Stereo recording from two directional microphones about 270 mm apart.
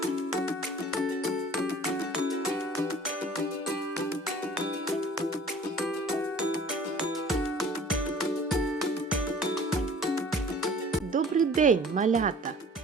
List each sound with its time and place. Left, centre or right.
11.1 s speech: right